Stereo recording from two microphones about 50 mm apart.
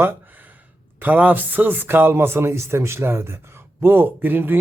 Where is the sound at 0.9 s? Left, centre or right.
Right.